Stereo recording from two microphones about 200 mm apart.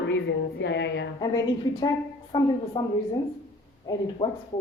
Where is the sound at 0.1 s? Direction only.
60° left (ahead or behind).